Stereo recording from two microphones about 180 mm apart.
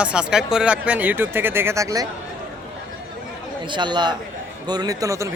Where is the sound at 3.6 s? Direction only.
25° right (ahead or behind).